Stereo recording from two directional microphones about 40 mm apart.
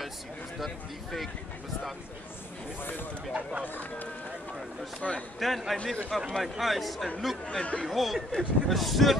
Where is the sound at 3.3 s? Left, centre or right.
Right.